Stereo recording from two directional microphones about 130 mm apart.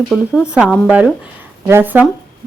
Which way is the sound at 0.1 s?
5° right (ahead or behind).